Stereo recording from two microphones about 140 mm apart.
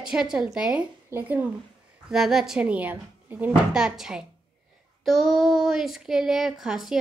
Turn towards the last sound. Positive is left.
turn(degrees=-5)  # may be behind; listen again after turning